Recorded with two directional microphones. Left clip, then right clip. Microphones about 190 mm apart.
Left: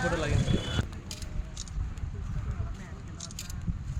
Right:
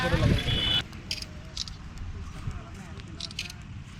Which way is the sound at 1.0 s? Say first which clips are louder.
Right 8 dB; 30° left (ahead or behind).